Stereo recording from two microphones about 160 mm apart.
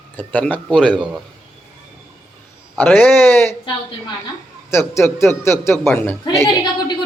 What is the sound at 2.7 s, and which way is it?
Speech, 10° left (ahead or behind).